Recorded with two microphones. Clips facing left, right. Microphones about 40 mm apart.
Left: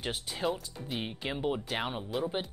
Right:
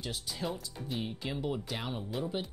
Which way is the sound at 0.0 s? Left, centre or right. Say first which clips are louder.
Left 4 dB; left.